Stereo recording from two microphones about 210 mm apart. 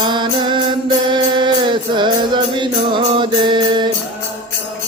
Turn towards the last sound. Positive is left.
turn(degrees=-20)  # may be behind; listen again after turning